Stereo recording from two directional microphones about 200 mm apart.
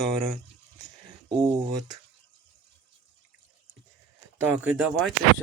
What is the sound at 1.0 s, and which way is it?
Speech, 25° right (ahead or behind).